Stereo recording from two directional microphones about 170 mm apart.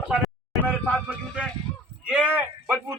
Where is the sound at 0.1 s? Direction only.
Centre (ahead or behind).